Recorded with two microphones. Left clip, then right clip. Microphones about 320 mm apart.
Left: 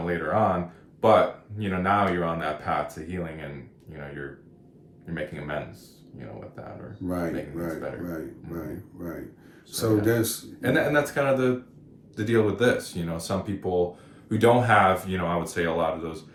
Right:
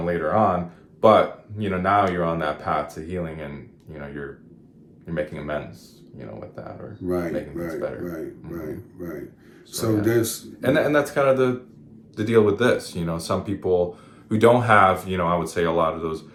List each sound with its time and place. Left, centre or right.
0.0 s speech: centre
1.5 s speech: centre
5.0 s speech: centre
7.1 s a man's voice: centre
10.6 s speech: centre